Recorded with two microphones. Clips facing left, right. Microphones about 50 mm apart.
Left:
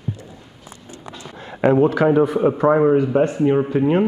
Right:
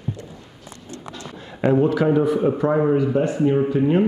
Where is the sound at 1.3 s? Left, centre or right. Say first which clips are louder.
Left 3 dB; left.